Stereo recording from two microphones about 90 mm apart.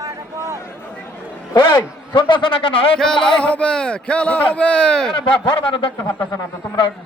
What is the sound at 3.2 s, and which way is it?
A man's voice, 10° left (ahead or behind).